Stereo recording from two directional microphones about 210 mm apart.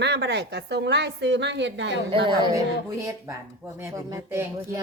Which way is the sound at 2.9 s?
15° right (ahead or behind).